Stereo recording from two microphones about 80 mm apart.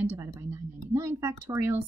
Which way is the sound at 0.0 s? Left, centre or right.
Right.